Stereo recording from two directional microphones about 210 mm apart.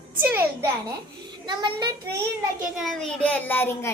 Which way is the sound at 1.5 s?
20° right (ahead or behind).